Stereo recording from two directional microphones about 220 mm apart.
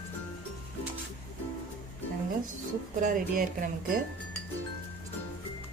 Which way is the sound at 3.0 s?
40° right (ahead or behind).